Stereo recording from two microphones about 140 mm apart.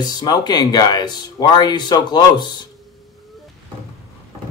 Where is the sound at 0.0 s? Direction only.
30° left (ahead or behind).